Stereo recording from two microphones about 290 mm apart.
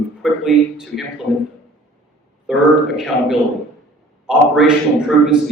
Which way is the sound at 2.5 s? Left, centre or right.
Centre.